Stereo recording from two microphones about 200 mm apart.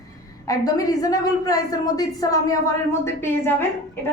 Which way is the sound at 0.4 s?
15° left (ahead or behind).